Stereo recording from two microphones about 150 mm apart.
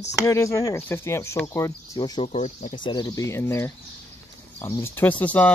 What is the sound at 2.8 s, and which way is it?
Speech, 30° left (ahead or behind).